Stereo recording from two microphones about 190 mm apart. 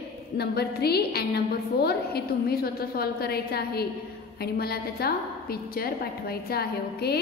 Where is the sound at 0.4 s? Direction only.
55° left (ahead or behind).